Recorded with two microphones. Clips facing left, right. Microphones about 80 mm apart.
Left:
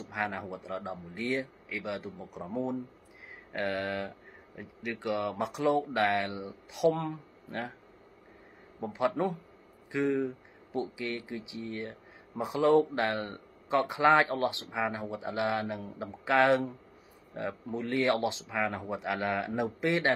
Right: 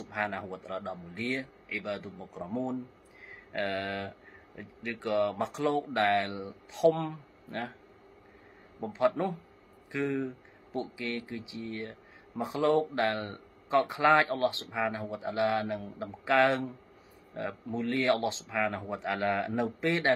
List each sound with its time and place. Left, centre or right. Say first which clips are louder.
0.1 s speech: right 1 dB; centre
2.4 s speech: even; centre
8.9 s speech: right 1 dB; centre
9.8 s a sound: left 3 dB; centre
11.0 s speech: even; centre